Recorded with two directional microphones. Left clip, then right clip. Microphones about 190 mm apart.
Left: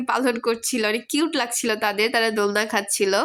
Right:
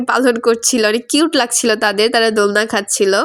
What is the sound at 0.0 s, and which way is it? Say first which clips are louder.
A woman's voice: right 8 dB; 25° right (ahead or behind).